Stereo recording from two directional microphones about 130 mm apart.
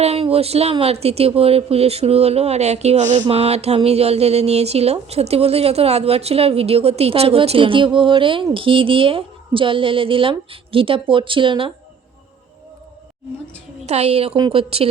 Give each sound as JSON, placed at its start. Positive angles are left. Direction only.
{"t": 0.0, "sound": "speech", "side_deg": -50}
{"t": 3.2, "sound": "speech", "side_deg": -50}
{"t": 13.8, "sound": "a woman's voice", "side_deg": -55}